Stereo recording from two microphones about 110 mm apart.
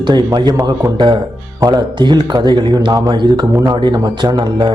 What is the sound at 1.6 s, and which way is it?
A man's voice, 40° right (ahead or behind).